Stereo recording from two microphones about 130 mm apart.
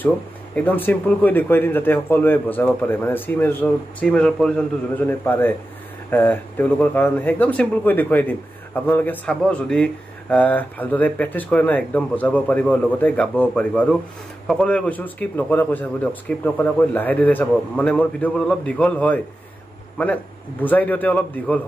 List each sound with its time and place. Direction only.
0.6 s a man's voice: 15° left (ahead or behind)